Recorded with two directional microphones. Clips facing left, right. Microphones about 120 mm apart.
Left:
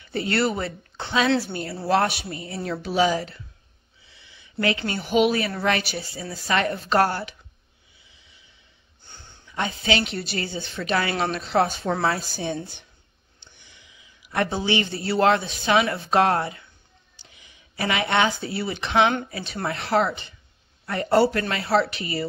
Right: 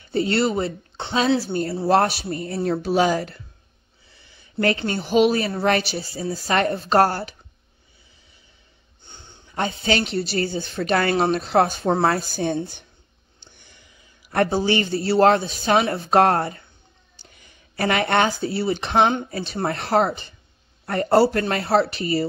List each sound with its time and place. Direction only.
0.0 s a woman's voice: 30° right (ahead or behind)
2.3 s a woman's voice: 45° right (ahead or behind)
9.0 s a sound: 20° right (ahead or behind)
9.5 s a woman's voice: 40° right (ahead or behind)